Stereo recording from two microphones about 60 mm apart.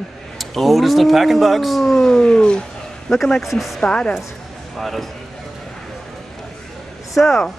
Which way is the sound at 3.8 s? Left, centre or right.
Centre.